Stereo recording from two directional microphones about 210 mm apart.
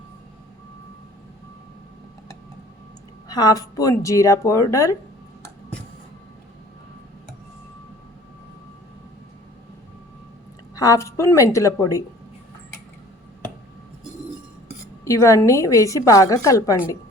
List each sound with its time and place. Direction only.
3.2 s a woman's voice: 20° left (ahead or behind)
10.8 s a woman's voice: 15° left (ahead or behind)
15.0 s a woman's voice: 15° left (ahead or behind)